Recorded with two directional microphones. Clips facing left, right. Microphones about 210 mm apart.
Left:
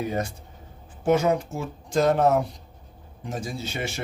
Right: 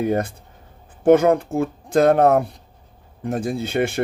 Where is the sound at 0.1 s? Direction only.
55° right (ahead or behind).